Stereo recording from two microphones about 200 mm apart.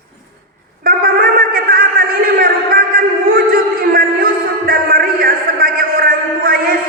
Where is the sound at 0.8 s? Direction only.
45° right (ahead or behind).